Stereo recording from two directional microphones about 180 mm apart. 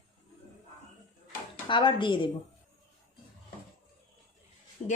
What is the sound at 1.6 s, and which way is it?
Speech, 25° left (ahead or behind).